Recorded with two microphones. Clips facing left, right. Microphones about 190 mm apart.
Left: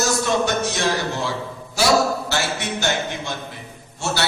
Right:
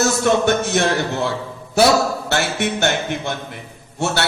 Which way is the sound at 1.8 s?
60° right (ahead or behind).